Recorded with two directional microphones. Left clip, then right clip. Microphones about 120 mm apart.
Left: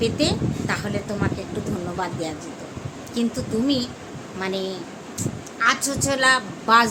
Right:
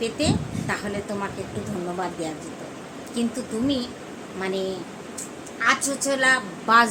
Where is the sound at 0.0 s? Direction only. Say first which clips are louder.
Left 3 dB; 30° left (ahead or behind).